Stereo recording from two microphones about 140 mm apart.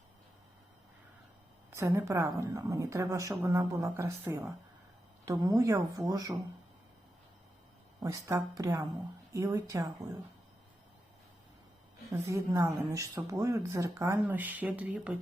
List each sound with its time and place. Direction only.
1.7 s speech: 20° right (ahead or behind)
8.0 s speech: 25° right (ahead or behind)
12.1 s speech: 20° right (ahead or behind)